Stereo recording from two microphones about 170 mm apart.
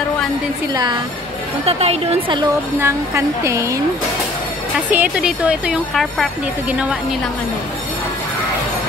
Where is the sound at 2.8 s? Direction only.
15° right (ahead or behind).